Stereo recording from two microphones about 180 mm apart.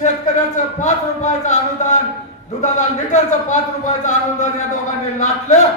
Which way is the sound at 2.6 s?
40° left (ahead or behind).